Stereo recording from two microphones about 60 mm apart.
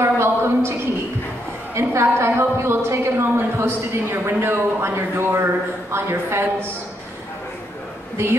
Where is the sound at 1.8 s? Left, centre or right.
Right.